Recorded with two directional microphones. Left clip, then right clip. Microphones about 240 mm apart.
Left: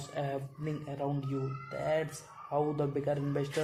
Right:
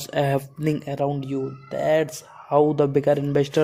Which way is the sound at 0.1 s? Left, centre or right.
Right.